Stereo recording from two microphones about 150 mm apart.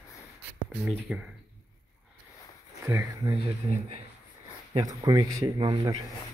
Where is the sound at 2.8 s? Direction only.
20° right (ahead or behind).